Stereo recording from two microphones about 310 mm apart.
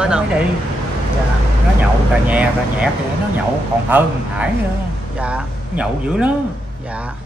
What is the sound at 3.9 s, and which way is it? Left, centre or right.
A man's voice, centre.